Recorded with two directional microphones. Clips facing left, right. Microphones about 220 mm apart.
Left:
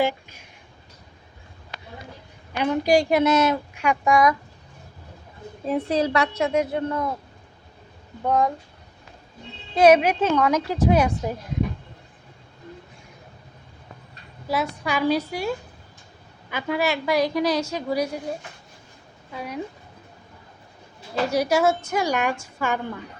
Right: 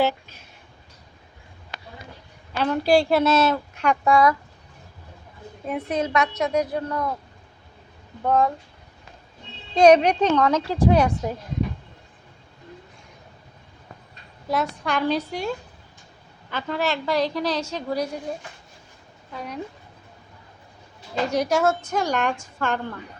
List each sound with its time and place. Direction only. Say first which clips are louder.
0.0 s speech: right 1 dB; 10° left (ahead or behind)
2.5 s speech: even; 15° left (ahead or behind)
5.6 s a woman's voice: left 3 dB; 30° left (ahead or behind)
8.2 s speech: right 1 dB; 15° left (ahead or behind)
9.7 s speech: right 1 dB; 5° left (ahead or behind)
10.9 s speech: right 1 dB; 5° left (ahead or behind)
14.4 s speech: even; 5° left (ahead or behind)
19.3 s speech: left 1 dB; 10° left (ahead or behind)
21.3 s speech: left 1 dB; 10° left (ahead or behind)